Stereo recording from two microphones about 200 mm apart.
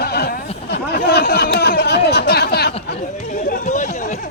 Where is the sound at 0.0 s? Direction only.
50° left (ahead or behind).